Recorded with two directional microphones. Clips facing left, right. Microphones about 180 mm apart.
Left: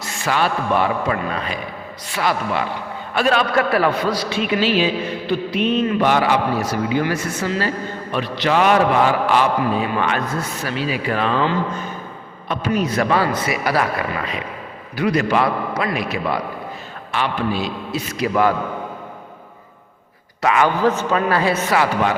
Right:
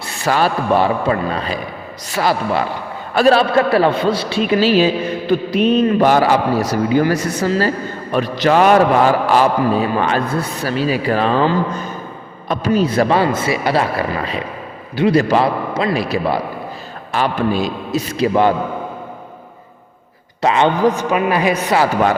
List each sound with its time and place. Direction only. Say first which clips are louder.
0.0 s a man's voice: right 4 dB; 35° right (ahead or behind)
18.2 s a man's voice: right 3 dB; 25° right (ahead or behind)
20.4 s a man's voice: right 3 dB; 25° right (ahead or behind)
20.8 s a man's voice: right 3 dB; 15° right (ahead or behind)